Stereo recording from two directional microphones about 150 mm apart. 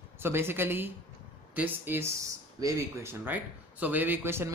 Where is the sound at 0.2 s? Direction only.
15° right (ahead or behind).